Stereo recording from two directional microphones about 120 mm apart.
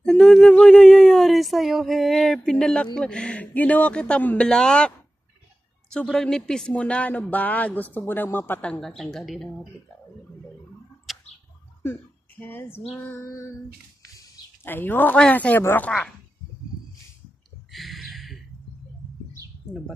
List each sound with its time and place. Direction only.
0.0 s speech: 5° left (ahead or behind)
6.0 s speech: 5° left (ahead or behind)
11.1 s bird: centre (ahead or behind)
11.8 s speech: 15° left (ahead or behind)
13.0 s female singing: 20° left (ahead or behind)
14.6 s speech: 15° left (ahead or behind)
17.7 s a sound: centre (ahead or behind)